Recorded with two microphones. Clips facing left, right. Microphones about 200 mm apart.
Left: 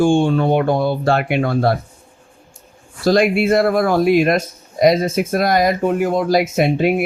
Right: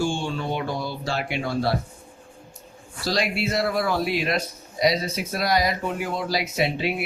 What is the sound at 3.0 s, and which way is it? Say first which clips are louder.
A man's voice: left 11 dB; 50° left (ahead or behind).